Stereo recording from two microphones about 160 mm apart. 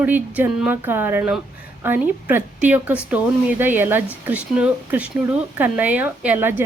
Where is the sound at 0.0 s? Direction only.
10° right (ahead or behind).